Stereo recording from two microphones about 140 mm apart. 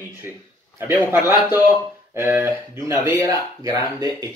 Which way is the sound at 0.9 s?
30° left (ahead or behind).